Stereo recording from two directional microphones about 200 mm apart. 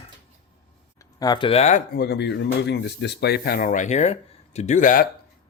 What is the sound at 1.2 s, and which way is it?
Speech, 20° left (ahead or behind).